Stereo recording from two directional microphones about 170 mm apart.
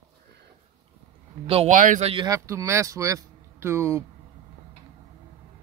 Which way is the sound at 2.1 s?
20° right (ahead or behind).